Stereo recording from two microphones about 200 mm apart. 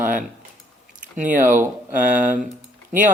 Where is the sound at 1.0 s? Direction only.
40° right (ahead or behind).